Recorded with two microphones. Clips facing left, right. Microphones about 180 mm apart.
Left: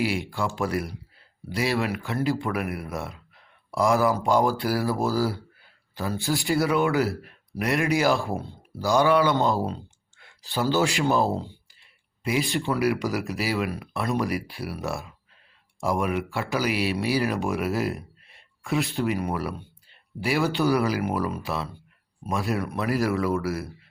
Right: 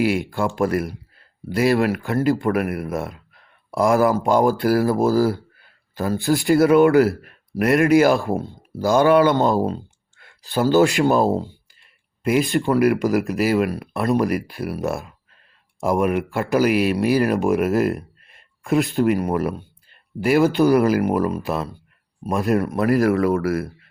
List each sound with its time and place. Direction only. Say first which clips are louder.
0.0 s speech: right 6 dB; 50° right (ahead or behind)